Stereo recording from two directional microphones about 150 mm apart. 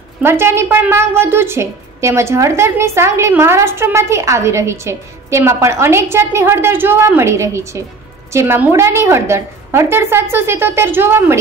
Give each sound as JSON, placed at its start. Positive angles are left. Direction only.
{"t": 0.2, "sound": "a woman's voice", "side_deg": -15}